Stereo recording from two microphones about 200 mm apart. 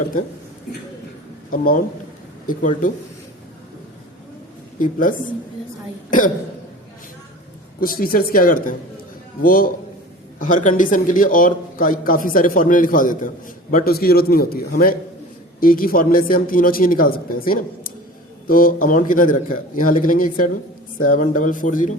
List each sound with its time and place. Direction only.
1.5 s a man's voice: 45° left (ahead or behind)
4.8 s speech: 40° left (ahead or behind)
7.8 s a man's voice: 45° left (ahead or behind)